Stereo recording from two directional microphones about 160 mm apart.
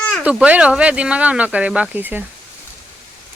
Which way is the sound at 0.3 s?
10° right (ahead or behind).